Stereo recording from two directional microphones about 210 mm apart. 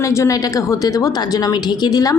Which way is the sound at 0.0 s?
15° left (ahead or behind).